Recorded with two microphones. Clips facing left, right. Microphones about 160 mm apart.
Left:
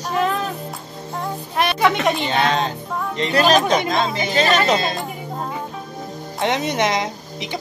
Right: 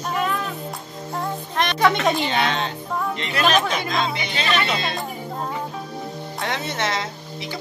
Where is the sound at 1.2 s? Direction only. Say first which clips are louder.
Left 2 dB; 5° left (ahead or behind).